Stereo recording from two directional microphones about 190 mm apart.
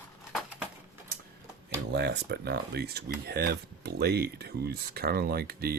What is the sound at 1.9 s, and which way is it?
Speech, 65° right (ahead or behind).